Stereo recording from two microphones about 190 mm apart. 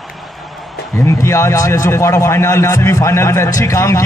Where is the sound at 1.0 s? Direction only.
15° left (ahead or behind).